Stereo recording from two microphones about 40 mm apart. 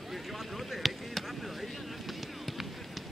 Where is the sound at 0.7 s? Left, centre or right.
Centre.